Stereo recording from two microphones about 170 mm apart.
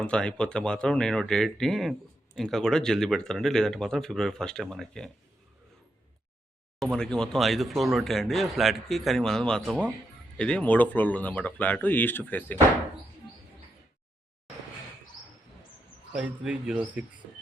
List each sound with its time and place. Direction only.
0.0 s speech: 5° left (ahead or behind)
6.7 s speech: 5° left (ahead or behind)
16.1 s speech: 5° right (ahead or behind)